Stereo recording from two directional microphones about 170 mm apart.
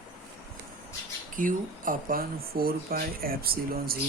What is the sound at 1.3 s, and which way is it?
Speech, 50° right (ahead or behind).